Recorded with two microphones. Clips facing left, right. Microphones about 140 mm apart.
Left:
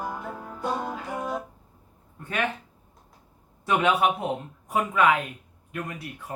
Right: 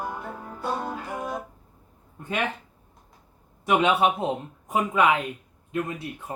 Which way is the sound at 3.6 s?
20° right (ahead or behind).